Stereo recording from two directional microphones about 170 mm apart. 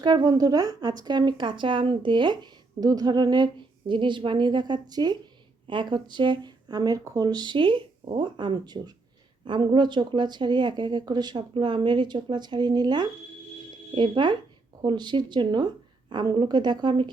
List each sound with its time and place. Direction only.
0.0 s speech: 25° right (ahead or behind)